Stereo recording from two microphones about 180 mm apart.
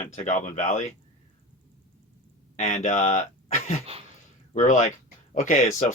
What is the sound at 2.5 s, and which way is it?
Speech, 40° left (ahead or behind).